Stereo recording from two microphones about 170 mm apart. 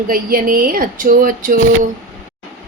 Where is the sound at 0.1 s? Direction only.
55° right (ahead or behind).